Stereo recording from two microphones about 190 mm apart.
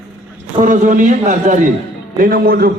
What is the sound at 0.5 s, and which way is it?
A man's voice, 40° right (ahead or behind).